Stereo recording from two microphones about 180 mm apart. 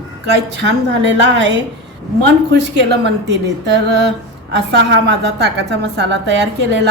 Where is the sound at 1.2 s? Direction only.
80° right.